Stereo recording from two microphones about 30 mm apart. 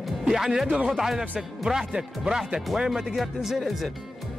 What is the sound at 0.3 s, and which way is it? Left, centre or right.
Speech, centre.